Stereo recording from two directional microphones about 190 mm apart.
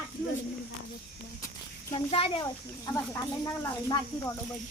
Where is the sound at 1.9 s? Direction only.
25° left (ahead or behind).